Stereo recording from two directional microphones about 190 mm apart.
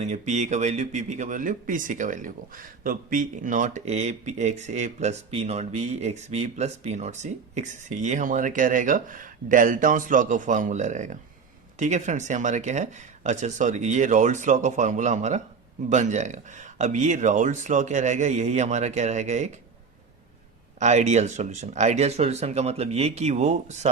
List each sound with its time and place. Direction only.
0.0 s speech: 35° right (ahead or behind)
20.7 s speech: 35° right (ahead or behind)